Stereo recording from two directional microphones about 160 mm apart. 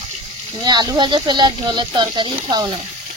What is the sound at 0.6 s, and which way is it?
Speech, 25° right (ahead or behind).